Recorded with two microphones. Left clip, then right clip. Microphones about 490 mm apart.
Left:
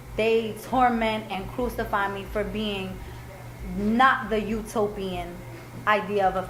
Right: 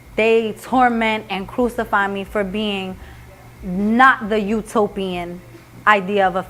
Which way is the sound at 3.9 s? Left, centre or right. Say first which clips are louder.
Right 7 dB; right.